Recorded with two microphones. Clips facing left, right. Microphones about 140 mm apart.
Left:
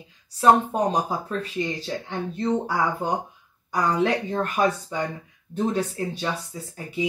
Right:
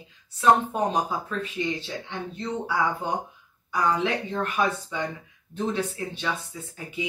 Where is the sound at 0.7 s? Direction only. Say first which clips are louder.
Left 2 dB; 40° left (ahead or behind).